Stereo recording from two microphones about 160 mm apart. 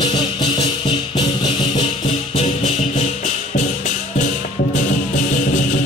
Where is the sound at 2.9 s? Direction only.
55° left (ahead or behind).